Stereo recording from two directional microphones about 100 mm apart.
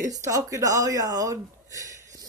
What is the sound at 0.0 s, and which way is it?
Speech, 35° right (ahead or behind).